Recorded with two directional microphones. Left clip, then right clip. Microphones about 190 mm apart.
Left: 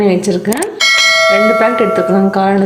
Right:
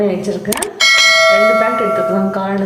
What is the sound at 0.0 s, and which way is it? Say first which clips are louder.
Speech: left 4 dB; 50° left (ahead or behind).